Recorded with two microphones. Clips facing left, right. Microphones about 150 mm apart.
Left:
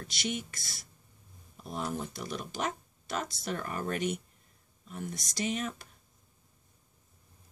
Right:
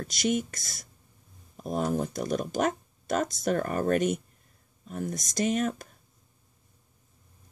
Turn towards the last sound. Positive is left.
turn(degrees=-45)  # may be behind; listen again after turning